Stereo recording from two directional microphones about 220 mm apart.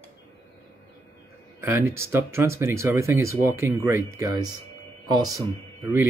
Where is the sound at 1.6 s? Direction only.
10° right (ahead or behind).